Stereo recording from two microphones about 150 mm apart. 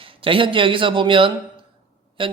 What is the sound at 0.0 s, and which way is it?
Speech, 35° right (ahead or behind).